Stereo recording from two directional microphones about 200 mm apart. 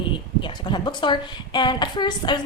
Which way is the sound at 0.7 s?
25° left (ahead or behind).